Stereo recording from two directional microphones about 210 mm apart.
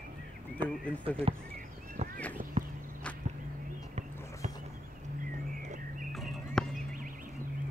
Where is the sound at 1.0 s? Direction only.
25° right (ahead or behind).